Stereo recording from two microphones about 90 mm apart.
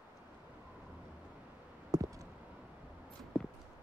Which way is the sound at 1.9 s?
40° right (ahead or behind).